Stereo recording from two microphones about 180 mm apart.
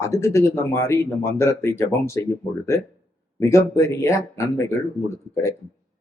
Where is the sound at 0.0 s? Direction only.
15° left (ahead or behind).